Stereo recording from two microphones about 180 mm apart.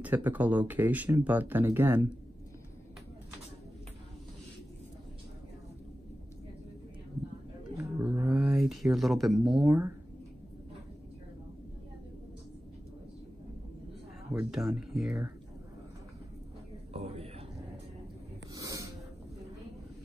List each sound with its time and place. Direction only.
0.0 s speech: 10° right (ahead or behind)
7.7 s roaring cats: 15° right (ahead or behind)
8.3 s speech: 5° right (ahead or behind)
14.3 s speech: 5° right (ahead or behind)
16.9 s a sound: 35° right (ahead or behind)
18.5 s a sound: 20° right (ahead or behind)